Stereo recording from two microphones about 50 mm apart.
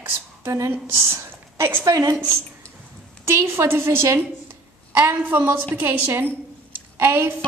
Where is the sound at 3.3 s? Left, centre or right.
Right.